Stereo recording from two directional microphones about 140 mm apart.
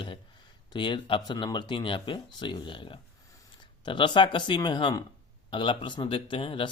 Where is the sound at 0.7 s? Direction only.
35° left (ahead or behind).